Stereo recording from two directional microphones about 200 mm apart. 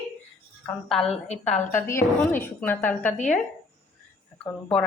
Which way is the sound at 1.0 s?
30° left (ahead or behind).